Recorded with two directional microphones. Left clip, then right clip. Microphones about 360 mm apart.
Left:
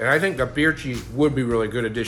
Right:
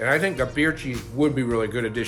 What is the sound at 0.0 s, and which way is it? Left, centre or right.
Speech, centre.